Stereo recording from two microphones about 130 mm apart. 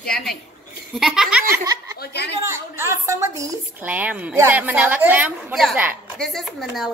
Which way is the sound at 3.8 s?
10° right (ahead or behind).